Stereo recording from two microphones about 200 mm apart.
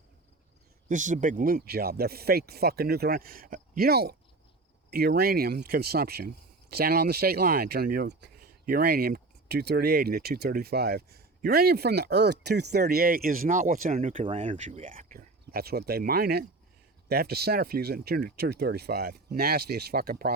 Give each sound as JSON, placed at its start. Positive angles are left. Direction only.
{"t": 0.9, "sound": "speech", "side_deg": -40}
{"t": 13.9, "sound": "speech", "side_deg": -30}